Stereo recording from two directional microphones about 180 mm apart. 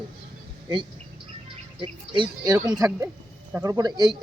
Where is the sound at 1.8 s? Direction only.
25° right (ahead or behind).